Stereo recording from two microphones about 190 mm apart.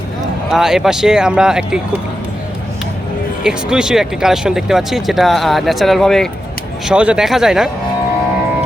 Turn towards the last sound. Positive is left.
turn(degrees=-5)  # may be behind; listen again after turning